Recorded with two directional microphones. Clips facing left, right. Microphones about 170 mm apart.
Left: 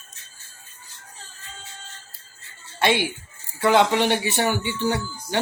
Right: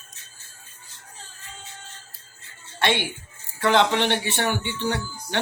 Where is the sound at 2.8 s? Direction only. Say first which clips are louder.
Left 3 dB; 10° left (ahead or behind).